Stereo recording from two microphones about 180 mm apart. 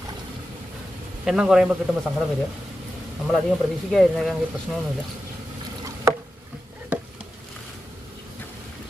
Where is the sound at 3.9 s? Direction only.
Centre (ahead or behind).